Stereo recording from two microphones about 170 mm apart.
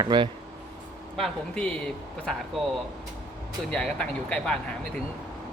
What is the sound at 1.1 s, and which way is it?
Speech, 5° left (ahead or behind).